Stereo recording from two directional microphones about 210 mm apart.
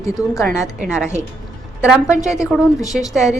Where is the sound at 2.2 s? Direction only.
5° right (ahead or behind).